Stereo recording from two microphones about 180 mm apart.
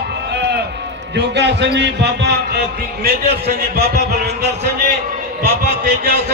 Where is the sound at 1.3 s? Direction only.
70° right (ahead or behind).